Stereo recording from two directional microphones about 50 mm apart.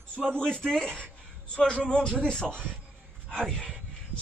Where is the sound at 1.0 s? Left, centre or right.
Centre.